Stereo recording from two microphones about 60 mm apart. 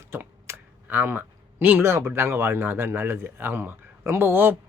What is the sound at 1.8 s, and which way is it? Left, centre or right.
Speech, right.